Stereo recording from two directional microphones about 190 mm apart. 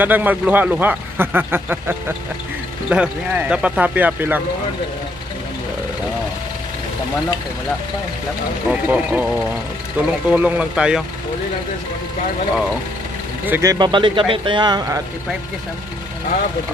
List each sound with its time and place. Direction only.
0.0 s speech: 10° right (ahead or behind)
8.6 s speech: 5° right (ahead or behind)
13.5 s speech: 15° right (ahead or behind)